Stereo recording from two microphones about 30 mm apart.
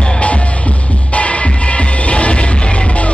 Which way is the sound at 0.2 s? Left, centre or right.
Left.